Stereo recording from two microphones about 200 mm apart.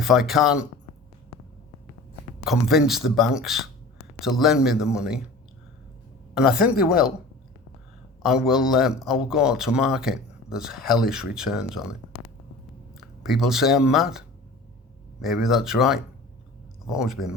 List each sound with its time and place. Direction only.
0.0 s speech: centre (ahead or behind)
2.4 s speech: centre (ahead or behind)
6.3 s speech: 5° right (ahead or behind)
8.4 s speech: 5° right (ahead or behind)